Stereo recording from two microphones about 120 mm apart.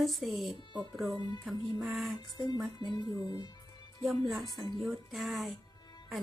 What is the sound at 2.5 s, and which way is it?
Speech, 35° left (ahead or behind).